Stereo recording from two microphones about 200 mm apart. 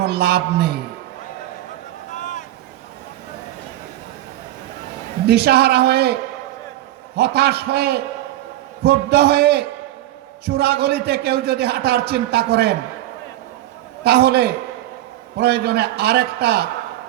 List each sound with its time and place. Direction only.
0.0 s a man's voice: 55° right (ahead or behind)
2.1 s boat: 40° left (ahead or behind)
5.2 s a man's voice: 55° right (ahead or behind)
7.2 s a man's voice: 55° right (ahead or behind)
14.0 s a man's voice: 55° right (ahead or behind)